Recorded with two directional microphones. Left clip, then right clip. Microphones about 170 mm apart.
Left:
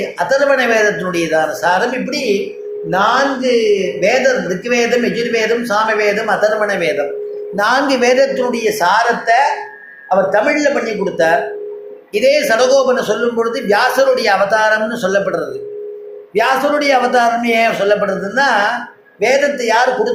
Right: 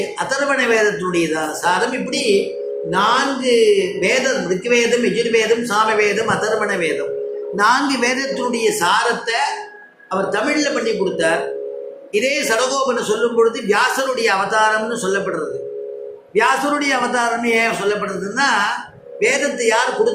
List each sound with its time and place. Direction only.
0.2 s a man's voice: 40° left (ahead or behind)